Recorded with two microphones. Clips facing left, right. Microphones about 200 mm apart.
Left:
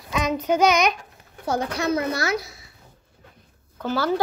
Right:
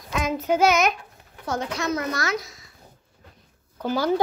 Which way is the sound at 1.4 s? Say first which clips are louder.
Left 3 dB; 35° left (ahead or behind).